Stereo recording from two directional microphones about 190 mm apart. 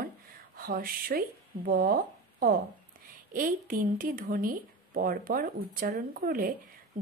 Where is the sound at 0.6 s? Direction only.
50° right (ahead or behind).